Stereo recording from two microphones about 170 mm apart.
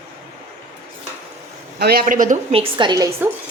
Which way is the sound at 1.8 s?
60° right (ahead or behind).